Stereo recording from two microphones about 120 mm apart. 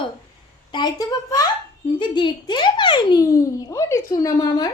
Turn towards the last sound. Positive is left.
turn(degrees=30)  # may be behind; listen again after turning